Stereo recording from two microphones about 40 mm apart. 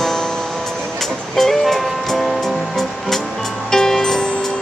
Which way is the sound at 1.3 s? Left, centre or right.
Centre.